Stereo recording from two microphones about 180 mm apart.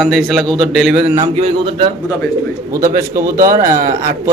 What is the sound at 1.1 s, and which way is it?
Speech, 30° right (ahead or behind).